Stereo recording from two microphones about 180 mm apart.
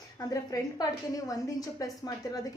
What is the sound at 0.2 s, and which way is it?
A woman's voice, 20° left (ahead or behind).